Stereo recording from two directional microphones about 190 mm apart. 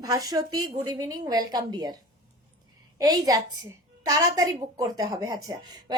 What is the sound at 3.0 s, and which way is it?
A woman's voice, 20° right (ahead or behind).